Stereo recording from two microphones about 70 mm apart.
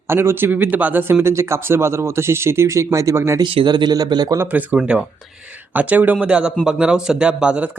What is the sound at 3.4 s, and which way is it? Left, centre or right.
Speech, right.